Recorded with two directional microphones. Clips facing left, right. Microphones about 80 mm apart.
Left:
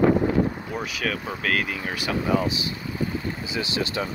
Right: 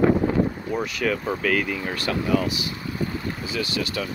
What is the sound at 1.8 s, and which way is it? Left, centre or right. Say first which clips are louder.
Speech: right 2 dB; centre.